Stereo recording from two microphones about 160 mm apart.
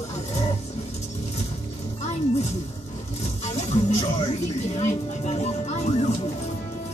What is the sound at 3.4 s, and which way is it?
Music, 45° left (ahead or behind).